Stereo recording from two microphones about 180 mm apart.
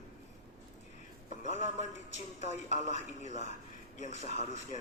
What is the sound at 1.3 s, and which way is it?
A man's voice, 40° left (ahead or behind).